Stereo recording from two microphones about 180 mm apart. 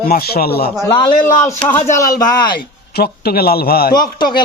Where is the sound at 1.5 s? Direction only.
15° left (ahead or behind).